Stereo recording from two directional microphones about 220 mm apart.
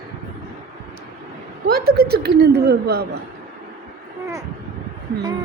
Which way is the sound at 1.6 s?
45° right (ahead or behind).